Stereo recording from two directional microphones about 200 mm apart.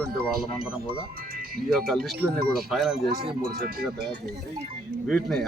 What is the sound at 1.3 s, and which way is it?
Music, 45° right (ahead or behind).